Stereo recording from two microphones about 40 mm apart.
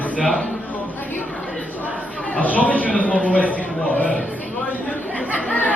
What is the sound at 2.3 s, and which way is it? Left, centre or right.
A man's voice, left.